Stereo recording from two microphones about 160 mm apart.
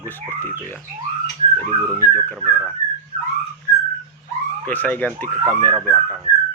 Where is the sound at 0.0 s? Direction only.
10° left (ahead or behind).